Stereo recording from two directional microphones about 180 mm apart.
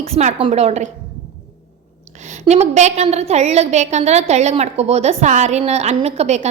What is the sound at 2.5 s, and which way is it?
A woman's voice, 40° right (ahead or behind).